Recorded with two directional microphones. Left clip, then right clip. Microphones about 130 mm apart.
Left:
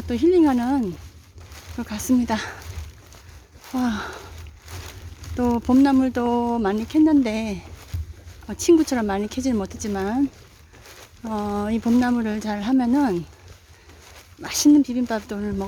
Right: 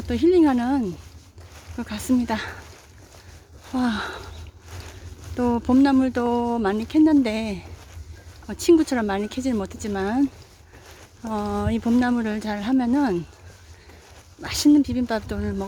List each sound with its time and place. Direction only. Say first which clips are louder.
0.1 s speech: even; 5° left (ahead or behind)
3.7 s speech: right 1 dB; centre (ahead or behind)
5.4 s speech: left 1 dB; 10° left (ahead or behind)
14.7 s speech: left 1 dB; 10° left (ahead or behind)